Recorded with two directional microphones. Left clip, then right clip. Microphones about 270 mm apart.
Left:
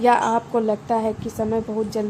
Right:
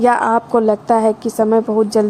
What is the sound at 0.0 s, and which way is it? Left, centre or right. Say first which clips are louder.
A woman's voice: right 4 dB; right.